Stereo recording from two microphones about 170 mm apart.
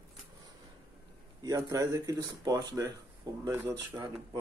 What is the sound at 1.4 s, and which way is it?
Speech, 20° right (ahead or behind).